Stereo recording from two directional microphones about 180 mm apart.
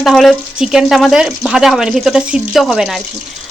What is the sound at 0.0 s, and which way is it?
Speech, centre (ahead or behind).